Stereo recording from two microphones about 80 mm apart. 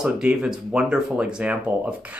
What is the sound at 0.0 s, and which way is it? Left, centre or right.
Speech, centre.